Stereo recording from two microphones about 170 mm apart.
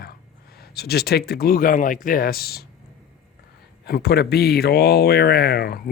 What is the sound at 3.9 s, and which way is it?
Speech, 65° left (ahead or behind).